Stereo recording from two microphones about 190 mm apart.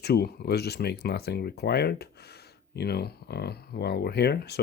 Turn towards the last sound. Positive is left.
turn(degrees=60)  # may be behind; listen again after turning